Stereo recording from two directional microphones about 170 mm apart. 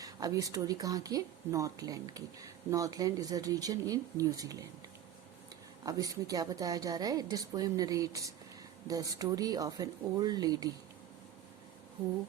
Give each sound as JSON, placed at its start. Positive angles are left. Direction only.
{"t": 0.0, "sound": "speech", "side_deg": -20}
{"t": 5.8, "sound": "speech", "side_deg": -20}